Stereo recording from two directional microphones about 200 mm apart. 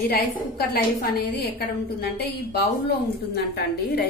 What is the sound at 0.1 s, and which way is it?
A woman's voice, 50° left (ahead or behind).